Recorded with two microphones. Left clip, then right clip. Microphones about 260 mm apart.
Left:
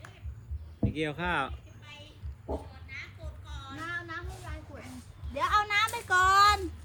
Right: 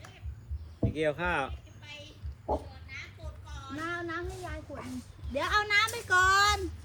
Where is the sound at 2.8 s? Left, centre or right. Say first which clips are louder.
Left 1 dB; centre.